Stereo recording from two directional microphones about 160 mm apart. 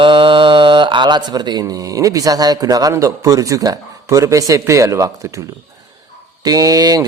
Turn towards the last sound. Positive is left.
turn(degrees=-25)  # may be behind; listen again after turning